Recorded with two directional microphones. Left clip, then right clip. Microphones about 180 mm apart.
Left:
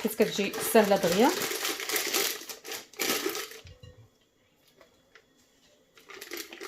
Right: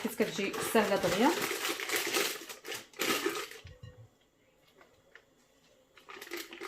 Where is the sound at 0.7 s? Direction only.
50° left (ahead or behind).